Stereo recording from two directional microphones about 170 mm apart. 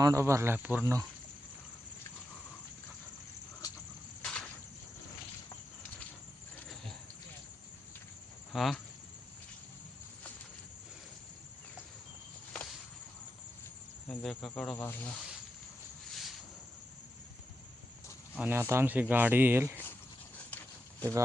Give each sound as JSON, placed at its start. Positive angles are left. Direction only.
{"t": 0.0, "sound": "speech", "side_deg": -20}
{"t": 4.2, "sound": "a sound", "side_deg": 5}
{"t": 8.5, "sound": "speech", "side_deg": 0}
{"t": 14.1, "sound": "insect", "side_deg": 0}
{"t": 18.3, "sound": "speech", "side_deg": -10}
{"t": 20.5, "sound": "a sound", "side_deg": 10}